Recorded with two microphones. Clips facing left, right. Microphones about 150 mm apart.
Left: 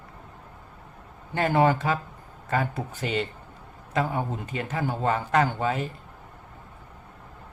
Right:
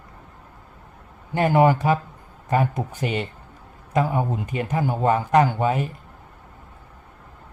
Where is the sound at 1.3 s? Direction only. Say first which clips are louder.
Right 4 dB; 15° right (ahead or behind).